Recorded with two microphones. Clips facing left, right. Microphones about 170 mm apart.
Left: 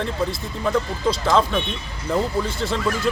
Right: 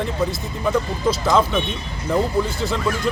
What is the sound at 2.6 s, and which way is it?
Speech, centre (ahead or behind).